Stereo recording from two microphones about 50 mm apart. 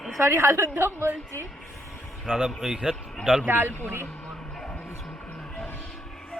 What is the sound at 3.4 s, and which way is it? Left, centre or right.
Speech, right.